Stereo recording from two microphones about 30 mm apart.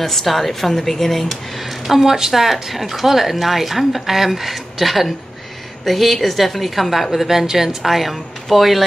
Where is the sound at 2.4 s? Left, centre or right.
Centre.